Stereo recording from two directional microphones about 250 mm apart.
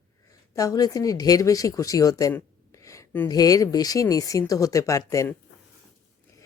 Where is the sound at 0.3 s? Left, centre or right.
Centre.